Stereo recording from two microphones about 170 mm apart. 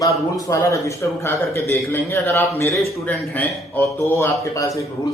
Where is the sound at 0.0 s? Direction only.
20° left (ahead or behind).